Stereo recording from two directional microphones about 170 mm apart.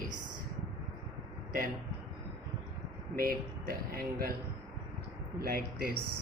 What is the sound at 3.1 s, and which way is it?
Speech, 60° right (ahead or behind).